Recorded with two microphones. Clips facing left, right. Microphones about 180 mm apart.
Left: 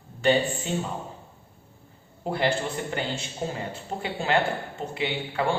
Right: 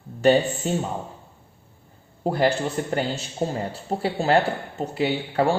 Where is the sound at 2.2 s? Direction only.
40° right (ahead or behind).